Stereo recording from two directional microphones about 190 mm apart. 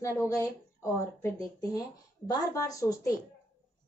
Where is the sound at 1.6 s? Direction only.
20° left (ahead or behind).